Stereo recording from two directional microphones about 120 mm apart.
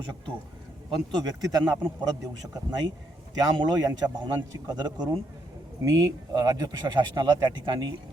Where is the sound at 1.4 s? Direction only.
35° right (ahead or behind).